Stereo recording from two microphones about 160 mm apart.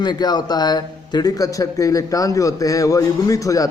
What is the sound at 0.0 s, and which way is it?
A man's voice, 25° left (ahead or behind).